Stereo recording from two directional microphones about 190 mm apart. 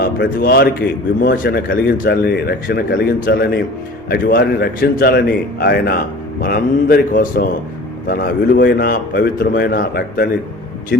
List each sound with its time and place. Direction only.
0.0 s a man's voice: 55° left (ahead or behind)